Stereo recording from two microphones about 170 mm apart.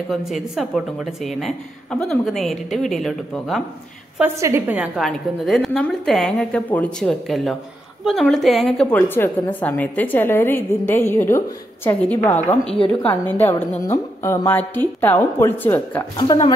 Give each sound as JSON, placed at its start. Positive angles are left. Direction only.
{"t": 0.1, "sound": "a woman's voice", "side_deg": 0}
{"t": 4.2, "sound": "a woman's voice", "side_deg": -15}
{"t": 16.2, "sound": "speech", "side_deg": 30}